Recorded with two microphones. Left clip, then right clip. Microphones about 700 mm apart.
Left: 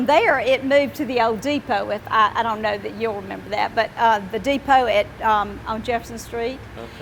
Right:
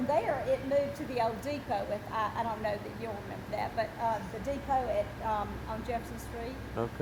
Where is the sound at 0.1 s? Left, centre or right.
Left.